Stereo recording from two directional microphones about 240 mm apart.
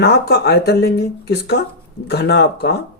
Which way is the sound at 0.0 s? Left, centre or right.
Left.